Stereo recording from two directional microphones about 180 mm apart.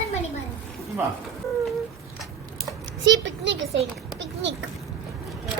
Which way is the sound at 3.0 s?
85° right.